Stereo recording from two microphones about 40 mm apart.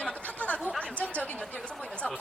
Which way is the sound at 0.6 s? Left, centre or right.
Left.